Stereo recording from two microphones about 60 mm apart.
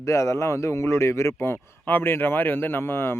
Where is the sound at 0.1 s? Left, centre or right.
Left.